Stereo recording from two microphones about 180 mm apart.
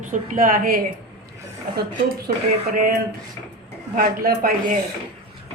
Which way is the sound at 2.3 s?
55° right (ahead or behind).